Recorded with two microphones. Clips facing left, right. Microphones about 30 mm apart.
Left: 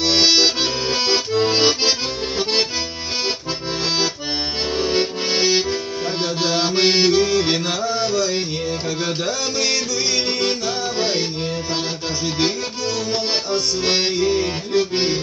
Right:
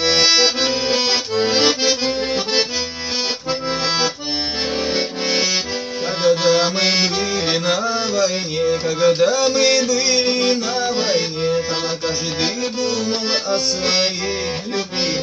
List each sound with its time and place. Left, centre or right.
0.0 s accordion: right
0.8 s accordion: right
1.3 s accordion: right
5.3 s accordion: right
6.2 s music: right
7.4 s music: right
7.7 s music: right
13.5 s accordion: right